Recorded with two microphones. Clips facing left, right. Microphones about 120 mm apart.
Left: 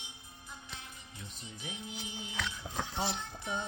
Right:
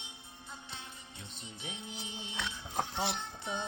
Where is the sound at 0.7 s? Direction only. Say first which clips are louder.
Right 1 dB; 30° right (ahead or behind).